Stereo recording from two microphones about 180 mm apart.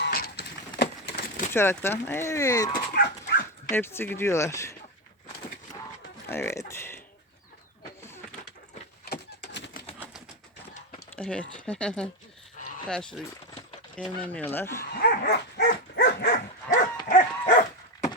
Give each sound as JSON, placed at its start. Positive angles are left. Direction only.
{"t": 0.0, "sound": "a sound", "side_deg": 55}
{"t": 1.5, "sound": "speech", "side_deg": 15}
{"t": 2.9, "sound": "dog", "side_deg": 60}
{"t": 3.7, "sound": "speech", "side_deg": 15}
{"t": 6.2, "sound": "speech", "side_deg": 15}
{"t": 9.0, "sound": "a sound", "side_deg": 70}
{"t": 11.2, "sound": "speech", "side_deg": 5}
{"t": 14.9, "sound": "dog", "side_deg": 55}
{"t": 16.6, "sound": "dog", "side_deg": 45}